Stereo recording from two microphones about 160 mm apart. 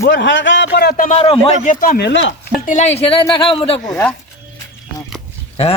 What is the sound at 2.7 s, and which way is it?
Speech, 45° left (ahead or behind).